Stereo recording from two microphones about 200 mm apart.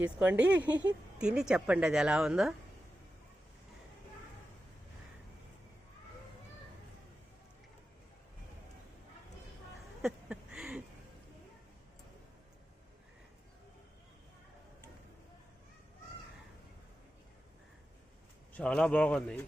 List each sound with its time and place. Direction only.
0.0 s speech: 5° right (ahead or behind)
10.0 s a sound: centre (ahead or behind)
18.5 s speech: 5° left (ahead or behind)